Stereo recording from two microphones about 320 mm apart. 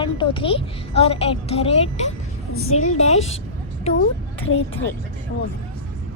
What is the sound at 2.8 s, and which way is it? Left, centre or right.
Speech, left.